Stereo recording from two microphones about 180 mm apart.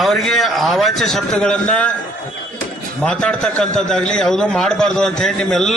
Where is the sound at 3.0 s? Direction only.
5° left (ahead or behind).